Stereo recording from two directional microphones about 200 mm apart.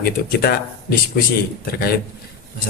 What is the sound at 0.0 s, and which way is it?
Speech, 50° left (ahead or behind).